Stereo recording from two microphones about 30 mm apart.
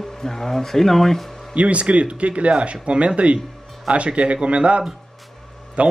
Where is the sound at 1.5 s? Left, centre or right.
Right.